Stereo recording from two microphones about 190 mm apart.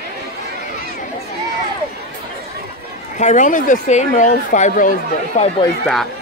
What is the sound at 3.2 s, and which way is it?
Speech, 40° left (ahead or behind).